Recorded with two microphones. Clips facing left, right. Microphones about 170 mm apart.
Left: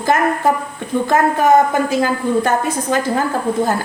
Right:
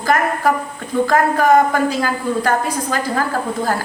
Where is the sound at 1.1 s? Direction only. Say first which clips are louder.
Left 1 dB; 20° left (ahead or behind).